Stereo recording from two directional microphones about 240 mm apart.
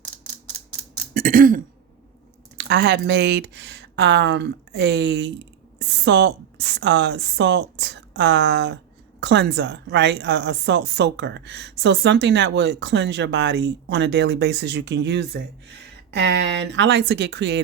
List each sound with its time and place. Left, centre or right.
1.1 s throat clearing: right
2.6 s a woman's voice: right